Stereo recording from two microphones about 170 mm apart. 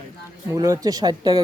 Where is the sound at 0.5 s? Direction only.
20° right (ahead or behind).